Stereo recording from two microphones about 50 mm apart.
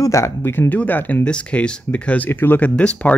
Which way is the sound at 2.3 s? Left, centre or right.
Left.